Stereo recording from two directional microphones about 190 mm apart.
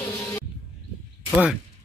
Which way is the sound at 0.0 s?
15° left (ahead or behind).